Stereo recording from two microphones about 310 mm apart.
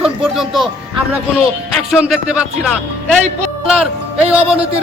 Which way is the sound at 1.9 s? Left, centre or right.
Centre.